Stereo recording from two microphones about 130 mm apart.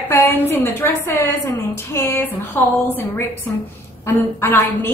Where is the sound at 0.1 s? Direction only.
15° left (ahead or behind).